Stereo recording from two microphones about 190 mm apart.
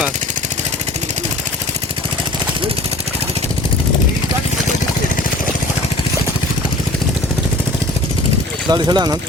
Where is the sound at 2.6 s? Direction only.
30° right (ahead or behind).